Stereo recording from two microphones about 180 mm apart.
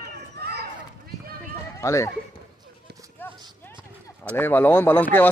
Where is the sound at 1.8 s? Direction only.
15° left (ahead or behind).